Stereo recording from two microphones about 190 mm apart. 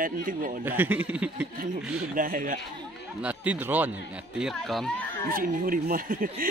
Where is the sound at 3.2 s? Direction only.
5° right (ahead or behind).